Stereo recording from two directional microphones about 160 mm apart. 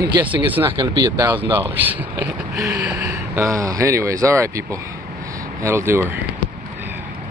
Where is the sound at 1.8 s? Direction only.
10° right (ahead or behind).